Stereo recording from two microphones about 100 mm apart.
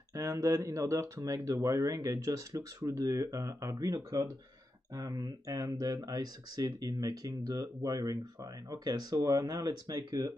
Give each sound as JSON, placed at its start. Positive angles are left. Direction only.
{"t": 0.1, "sound": "speech", "side_deg": -30}
{"t": 5.9, "sound": "speech", "side_deg": -45}